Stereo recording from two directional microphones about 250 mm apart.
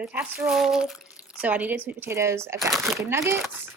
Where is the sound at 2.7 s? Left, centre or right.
Centre.